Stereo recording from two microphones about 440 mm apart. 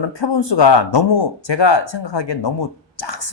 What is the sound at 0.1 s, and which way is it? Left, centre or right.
Speech, left.